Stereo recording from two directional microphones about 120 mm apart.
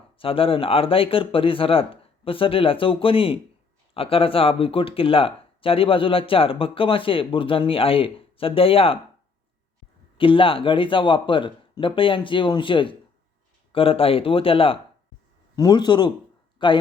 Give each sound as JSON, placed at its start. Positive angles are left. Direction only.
{"t": 0.2, "sound": "speech", "side_deg": 50}
{"t": 10.2, "sound": "speech", "side_deg": 45}
{"t": 15.5, "sound": "a man's voice", "side_deg": 35}